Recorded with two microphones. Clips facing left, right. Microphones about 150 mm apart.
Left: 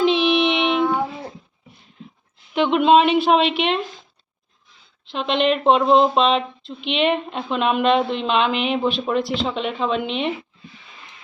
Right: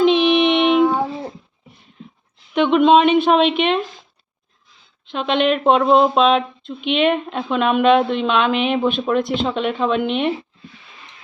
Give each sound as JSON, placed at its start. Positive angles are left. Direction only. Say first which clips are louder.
{"t": 0.0, "sound": "child singing", "louder": "right 3 dB", "side_deg": 0}
{"t": 2.5, "sound": "a woman's voice", "louder": "right 2 dB", "side_deg": 5}
{"t": 5.4, "sound": "a woman's voice", "louder": "right 1 dB", "side_deg": 0}
{"t": 9.2, "sound": "speech", "louder": "right 3 dB", "side_deg": -50}
{"t": 9.5, "sound": "a woman's voice", "louder": "right 3 dB", "side_deg": 0}
{"t": 10.0, "sound": "speech", "louder": "right 5 dB", "side_deg": -50}